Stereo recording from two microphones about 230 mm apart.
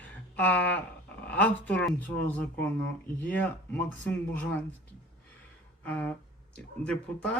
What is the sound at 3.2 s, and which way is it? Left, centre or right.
Speech, centre.